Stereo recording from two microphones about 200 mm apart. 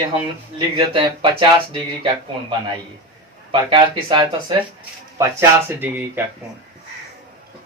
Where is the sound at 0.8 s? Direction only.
25° right (ahead or behind).